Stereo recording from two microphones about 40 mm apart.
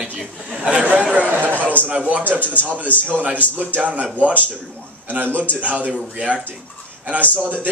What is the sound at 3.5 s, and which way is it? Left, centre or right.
Speech, right.